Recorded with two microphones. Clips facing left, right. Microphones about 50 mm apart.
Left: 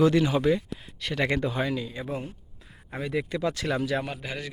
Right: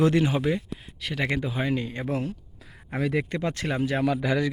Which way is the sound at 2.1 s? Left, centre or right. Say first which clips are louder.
Right 5 dB; right.